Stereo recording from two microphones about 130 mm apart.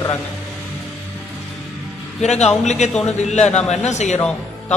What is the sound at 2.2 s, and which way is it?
A man's voice, 60° left (ahead or behind).